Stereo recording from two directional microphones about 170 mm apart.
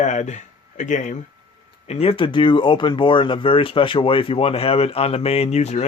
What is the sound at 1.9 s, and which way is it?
Speech, 35° left (ahead or behind).